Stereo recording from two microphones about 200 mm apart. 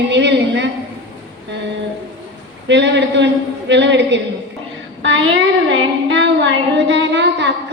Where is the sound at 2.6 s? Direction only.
60° right (ahead or behind).